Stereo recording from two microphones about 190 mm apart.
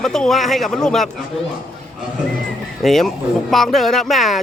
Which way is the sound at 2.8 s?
Centre (ahead or behind).